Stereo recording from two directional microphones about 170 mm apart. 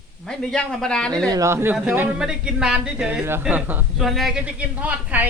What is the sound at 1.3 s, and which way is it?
Speech, 15° right (ahead or behind).